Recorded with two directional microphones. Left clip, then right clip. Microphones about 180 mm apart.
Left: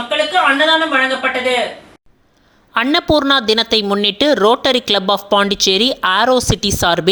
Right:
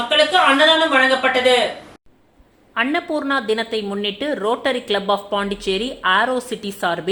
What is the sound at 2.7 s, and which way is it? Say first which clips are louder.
A woman's voice: left 7 dB; 35° left (ahead or behind).